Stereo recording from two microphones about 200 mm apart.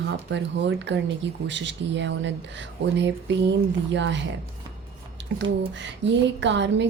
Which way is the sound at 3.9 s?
65° right (ahead or behind).